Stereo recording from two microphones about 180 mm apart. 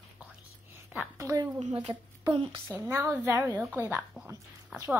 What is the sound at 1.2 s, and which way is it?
A woman's voice, 15° right (ahead or behind).